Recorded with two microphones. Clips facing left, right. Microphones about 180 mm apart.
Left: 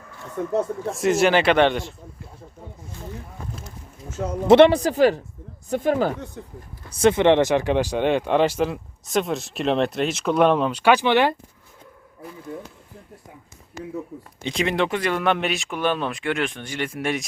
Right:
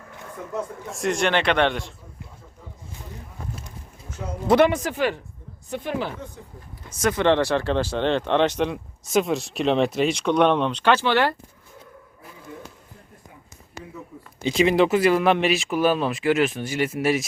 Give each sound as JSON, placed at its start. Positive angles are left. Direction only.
{"t": 0.9, "sound": "speech", "side_deg": 0}
{"t": 4.4, "sound": "speech", "side_deg": 25}
{"t": 6.9, "sound": "speech", "side_deg": 25}
{"t": 14.4, "sound": "speech", "side_deg": 0}